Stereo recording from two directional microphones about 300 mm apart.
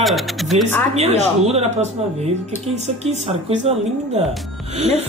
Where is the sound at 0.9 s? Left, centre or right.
Right.